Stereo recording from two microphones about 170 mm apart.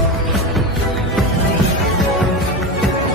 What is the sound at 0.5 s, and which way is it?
Music, centre (ahead or behind).